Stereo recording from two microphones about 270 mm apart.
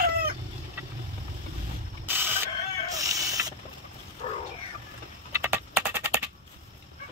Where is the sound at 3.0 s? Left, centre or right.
Centre.